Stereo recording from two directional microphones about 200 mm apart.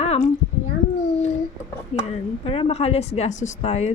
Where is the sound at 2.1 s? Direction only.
30° left (ahead or behind).